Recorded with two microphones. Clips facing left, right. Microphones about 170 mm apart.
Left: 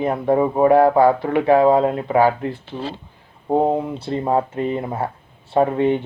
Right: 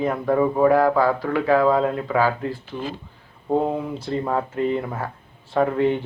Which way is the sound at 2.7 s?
35° left (ahead or behind).